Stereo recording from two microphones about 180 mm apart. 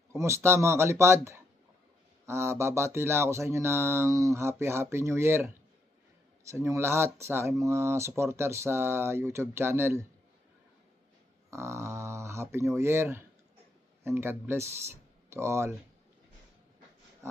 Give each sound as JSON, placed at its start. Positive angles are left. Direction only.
{"t": 0.1, "sound": "speech", "side_deg": -15}
{"t": 6.5, "sound": "speech", "side_deg": -15}
{"t": 11.5, "sound": "speech", "side_deg": -15}